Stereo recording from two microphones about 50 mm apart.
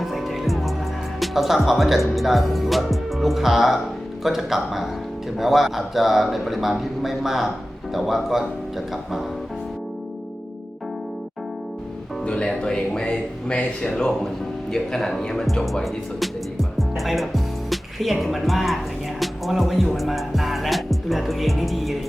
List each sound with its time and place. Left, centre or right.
0.0 s music: centre
1.2 s speech: centre
12.2 s music: centre
12.6 s speech: centre
14.7 s speech: centre
19.2 s music: centre